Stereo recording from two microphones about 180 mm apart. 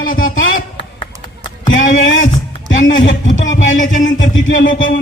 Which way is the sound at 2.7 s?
90° left.